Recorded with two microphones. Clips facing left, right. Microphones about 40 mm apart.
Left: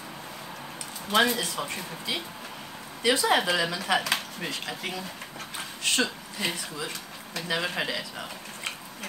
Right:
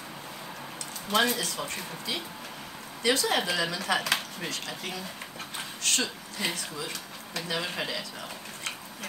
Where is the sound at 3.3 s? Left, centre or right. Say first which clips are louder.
Left 3 dB; centre.